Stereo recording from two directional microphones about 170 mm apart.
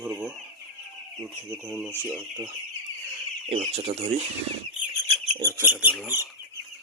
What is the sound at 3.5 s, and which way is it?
Speech, 35° right (ahead or behind).